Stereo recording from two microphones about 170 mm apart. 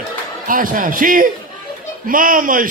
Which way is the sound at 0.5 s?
50° right (ahead or behind).